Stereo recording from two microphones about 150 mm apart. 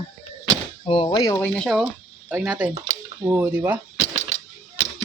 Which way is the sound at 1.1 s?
25° left (ahead or behind).